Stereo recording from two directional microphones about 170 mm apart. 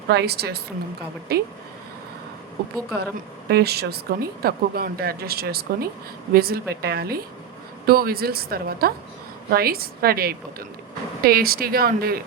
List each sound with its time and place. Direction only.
0.1 s speech: 70° right (ahead or behind)
2.6 s speech: 70° right (ahead or behind)